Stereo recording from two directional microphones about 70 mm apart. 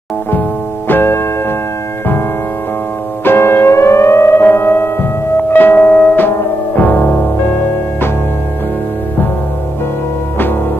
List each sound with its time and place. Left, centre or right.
0.3 s music: left
3.3 s music: left